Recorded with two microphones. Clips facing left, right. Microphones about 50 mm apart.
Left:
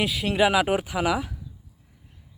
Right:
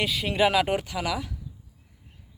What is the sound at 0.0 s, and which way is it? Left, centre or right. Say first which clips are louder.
Speech: left 2 dB; centre.